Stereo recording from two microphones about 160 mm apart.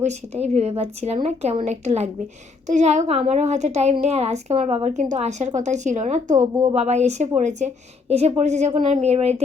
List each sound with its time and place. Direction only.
0.0 s a woman's voice: 45° right (ahead or behind)